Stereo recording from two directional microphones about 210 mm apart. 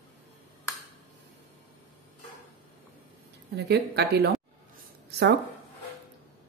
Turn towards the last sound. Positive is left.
turn(degrees=-50)  # may be behind; listen again after turning